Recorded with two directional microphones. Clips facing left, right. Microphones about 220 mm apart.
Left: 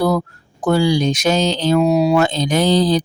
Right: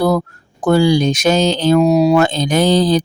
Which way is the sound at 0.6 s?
50° right (ahead or behind).